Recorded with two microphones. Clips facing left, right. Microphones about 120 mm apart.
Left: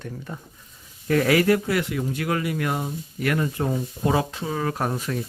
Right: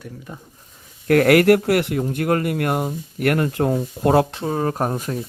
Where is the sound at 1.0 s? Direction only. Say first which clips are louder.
Right 6 dB; 65° right (ahead or behind).